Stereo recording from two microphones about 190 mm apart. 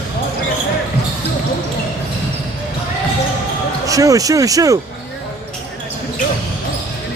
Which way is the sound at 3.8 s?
15° right (ahead or behind).